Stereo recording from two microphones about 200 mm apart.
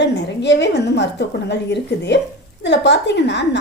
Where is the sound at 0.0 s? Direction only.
60° left (ahead or behind).